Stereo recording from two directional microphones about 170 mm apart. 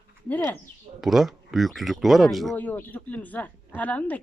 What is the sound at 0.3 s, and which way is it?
Speech, 10° left (ahead or behind).